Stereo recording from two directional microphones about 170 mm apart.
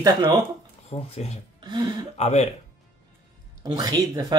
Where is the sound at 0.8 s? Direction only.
35° left (ahead or behind).